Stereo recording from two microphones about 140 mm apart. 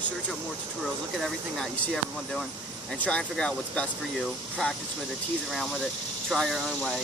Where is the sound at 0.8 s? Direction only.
Centre (ahead or behind).